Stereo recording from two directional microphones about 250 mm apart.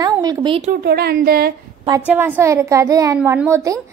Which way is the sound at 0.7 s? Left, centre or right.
Right.